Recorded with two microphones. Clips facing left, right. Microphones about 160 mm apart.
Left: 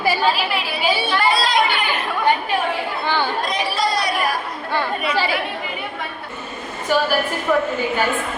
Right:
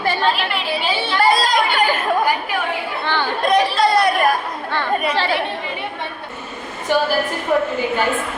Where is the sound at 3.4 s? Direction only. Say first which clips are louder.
Right 6 dB; 55° right (ahead or behind).